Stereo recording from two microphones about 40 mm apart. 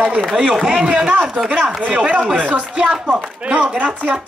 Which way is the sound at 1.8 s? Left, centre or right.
Right.